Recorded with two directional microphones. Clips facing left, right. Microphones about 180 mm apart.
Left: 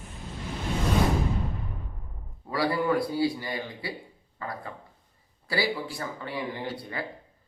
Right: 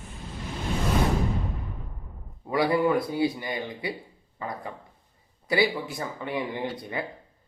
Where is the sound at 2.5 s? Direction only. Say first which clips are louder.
Right 3 dB; 20° right (ahead or behind).